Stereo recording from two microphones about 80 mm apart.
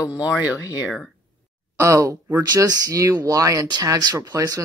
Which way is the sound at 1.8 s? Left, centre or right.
Right.